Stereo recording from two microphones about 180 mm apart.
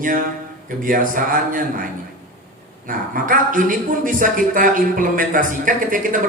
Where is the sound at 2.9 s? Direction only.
50° right (ahead or behind).